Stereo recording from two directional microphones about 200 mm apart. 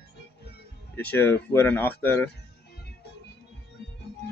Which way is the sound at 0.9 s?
10° left (ahead or behind).